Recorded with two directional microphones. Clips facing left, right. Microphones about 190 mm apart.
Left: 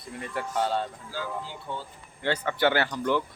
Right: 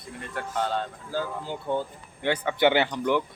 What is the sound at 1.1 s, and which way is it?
Speech, 50° right (ahead or behind).